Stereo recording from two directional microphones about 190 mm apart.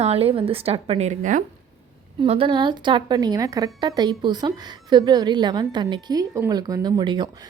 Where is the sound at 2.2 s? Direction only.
30° right (ahead or behind).